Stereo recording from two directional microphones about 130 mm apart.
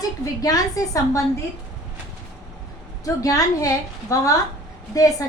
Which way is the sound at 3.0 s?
25° left (ahead or behind).